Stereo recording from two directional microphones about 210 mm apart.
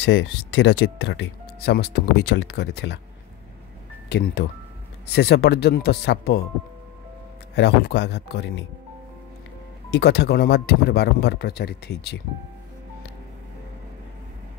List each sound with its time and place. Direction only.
0.0 s speech: 60° left (ahead or behind)
5.0 s speech: 50° left (ahead or behind)
7.5 s speech: 55° left (ahead or behind)
9.9 s speech: 50° left (ahead or behind)